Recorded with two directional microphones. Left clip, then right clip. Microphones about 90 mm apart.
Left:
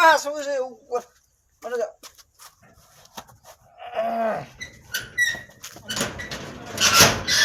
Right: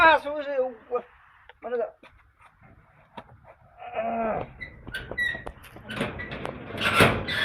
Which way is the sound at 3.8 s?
25° left (ahead or behind).